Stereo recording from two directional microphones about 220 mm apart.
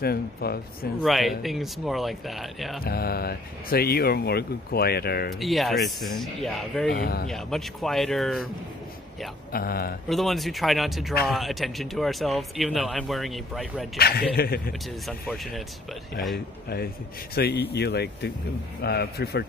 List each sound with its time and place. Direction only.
0.0 s speech: 45° left (ahead or behind)
1.0 s speech: centre (ahead or behind)
2.8 s speech: 45° left (ahead or behind)
5.4 s speech: centre (ahead or behind)
6.9 s speech: 45° left (ahead or behind)
7.2 s speech: centre (ahead or behind)
9.5 s speech: 45° left (ahead or behind)
10.0 s speech: centre (ahead or behind)
13.9 s speech: 45° left (ahead or behind)
14.7 s speech: centre (ahead or behind)
16.6 s speech: 45° left (ahead or behind)